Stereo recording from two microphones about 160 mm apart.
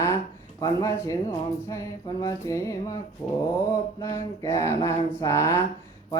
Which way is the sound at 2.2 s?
20° left (ahead or behind).